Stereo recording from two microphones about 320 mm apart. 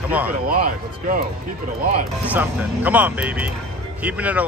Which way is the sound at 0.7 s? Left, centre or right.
Right.